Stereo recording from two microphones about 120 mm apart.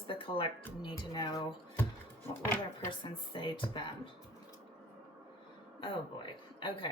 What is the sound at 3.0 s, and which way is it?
Speech, 45° left (ahead or behind).